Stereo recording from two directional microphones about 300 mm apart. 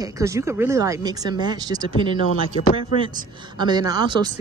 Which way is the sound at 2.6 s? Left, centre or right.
Left.